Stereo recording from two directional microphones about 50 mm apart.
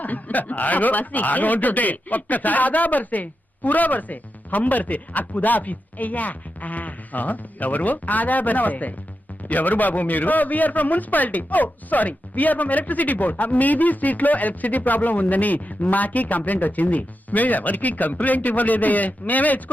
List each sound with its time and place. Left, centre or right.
0.0 s a man's voice: left